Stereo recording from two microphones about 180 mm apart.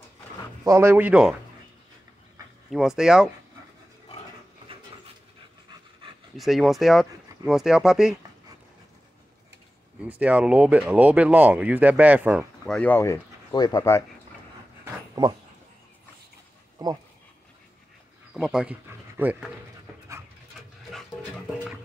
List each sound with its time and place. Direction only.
0.7 s speech: 15° right (ahead or behind)
2.7 s speech: centre (ahead or behind)
6.3 s speech: centre (ahead or behind)
10.0 s speech: 5° right (ahead or behind)
12.6 s speech: 5° left (ahead or behind)
16.7 s speech: 20° right (ahead or behind)
18.3 s speech: 5° right (ahead or behind)